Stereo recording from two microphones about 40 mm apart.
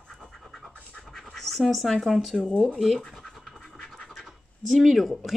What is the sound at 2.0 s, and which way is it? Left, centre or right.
Speech, centre.